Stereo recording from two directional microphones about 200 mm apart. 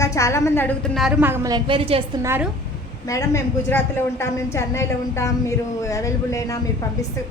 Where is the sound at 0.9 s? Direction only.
5° right (ahead or behind); by 2.0 s 25° right (ahead or behind).